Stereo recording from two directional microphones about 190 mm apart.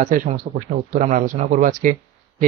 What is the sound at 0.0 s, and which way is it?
A man's voice, 45° right (ahead or behind).